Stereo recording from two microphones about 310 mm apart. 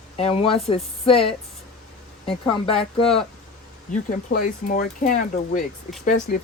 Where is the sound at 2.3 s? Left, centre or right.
Centre.